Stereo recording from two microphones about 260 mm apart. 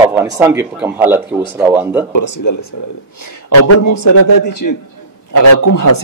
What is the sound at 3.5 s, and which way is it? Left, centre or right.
Speech, left.